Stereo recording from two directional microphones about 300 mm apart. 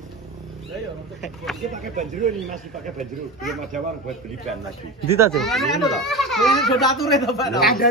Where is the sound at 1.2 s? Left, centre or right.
Centre.